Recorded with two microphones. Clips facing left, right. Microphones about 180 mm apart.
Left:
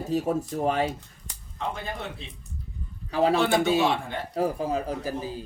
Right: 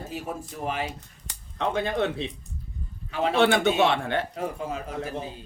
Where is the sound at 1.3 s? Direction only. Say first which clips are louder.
Right 5 dB; 80° right.